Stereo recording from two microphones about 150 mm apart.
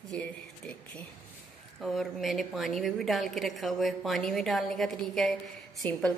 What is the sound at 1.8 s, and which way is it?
A woman's voice, centre (ahead or behind).